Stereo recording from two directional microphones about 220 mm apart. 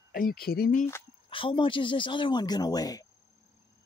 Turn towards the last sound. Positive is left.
turn(degrees=15)  # may be behind; listen again after turning